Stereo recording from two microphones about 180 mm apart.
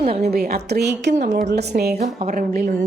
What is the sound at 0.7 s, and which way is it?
A woman's voice, 65° right (ahead or behind).